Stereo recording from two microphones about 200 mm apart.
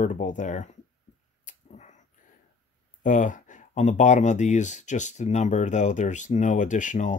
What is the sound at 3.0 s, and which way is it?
Speech, 40° left (ahead or behind).